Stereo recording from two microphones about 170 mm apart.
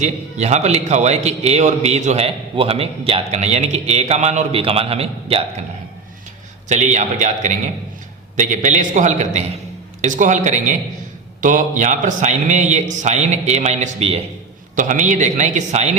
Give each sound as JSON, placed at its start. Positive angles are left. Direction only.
{"t": 0.0, "sound": "a man's voice", "side_deg": -40}
{"t": 6.7, "sound": "a man's voice", "side_deg": -45}
{"t": 14.8, "sound": "a man's voice", "side_deg": -50}